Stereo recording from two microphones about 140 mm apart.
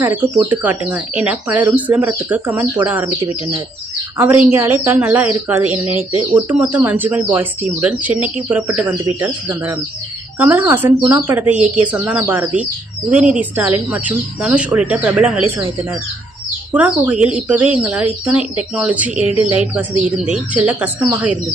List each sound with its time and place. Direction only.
0.0 s speech: 15° right (ahead or behind)
4.2 s speech: 15° right (ahead or behind)
19.2 s speech: 45° left (ahead or behind)
19.5 s speech: 10° right (ahead or behind)